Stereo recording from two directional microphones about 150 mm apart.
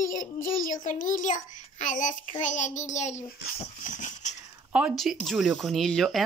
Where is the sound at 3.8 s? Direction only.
55° left (ahead or behind).